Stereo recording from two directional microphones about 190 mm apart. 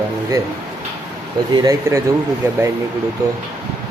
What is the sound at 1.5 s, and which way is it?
Speech, 20° right (ahead or behind).